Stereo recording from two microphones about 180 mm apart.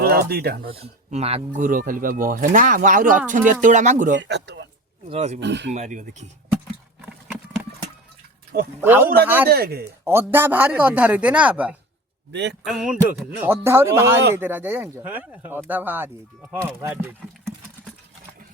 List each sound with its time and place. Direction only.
0.0 s speech: 60° right (ahead or behind)
0.7 s speech: 35° right (ahead or behind)
4.2 s speech: 70° right (ahead or behind)
5.0 s speech: 35° right (ahead or behind)
5.4 s speech: 75° right (ahead or behind)
5.7 s speech: 40° right (ahead or behind)
8.8 s speech: 10° right (ahead or behind)
9.5 s speech: 60° right (ahead or behind)
10.0 s speech: 15° right (ahead or behind)
12.3 s speech: 75° right (ahead or behind)
12.6 s speech: 5° right (ahead or behind)